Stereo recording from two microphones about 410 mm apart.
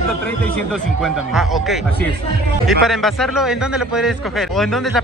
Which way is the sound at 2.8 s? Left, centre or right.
Centre.